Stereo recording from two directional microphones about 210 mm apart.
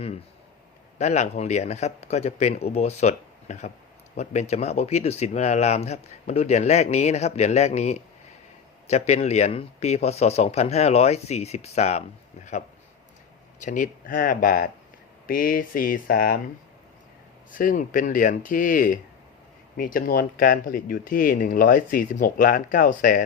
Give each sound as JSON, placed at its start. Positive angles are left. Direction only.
{"t": 0.9, "sound": "speech", "side_deg": 30}
{"t": 17.5, "sound": "speech", "side_deg": 40}